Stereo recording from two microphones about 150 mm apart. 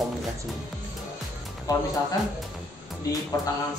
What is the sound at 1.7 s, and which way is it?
Speech, 25° left (ahead or behind).